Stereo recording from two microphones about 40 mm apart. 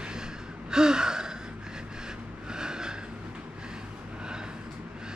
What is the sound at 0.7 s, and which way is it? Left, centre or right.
Gasp, centre.